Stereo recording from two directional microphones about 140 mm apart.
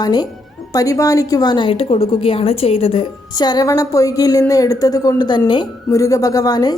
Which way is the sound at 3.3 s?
30° left (ahead or behind).